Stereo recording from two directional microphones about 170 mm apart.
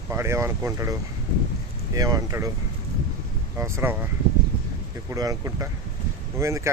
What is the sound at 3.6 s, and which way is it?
Speech, 15° right (ahead or behind).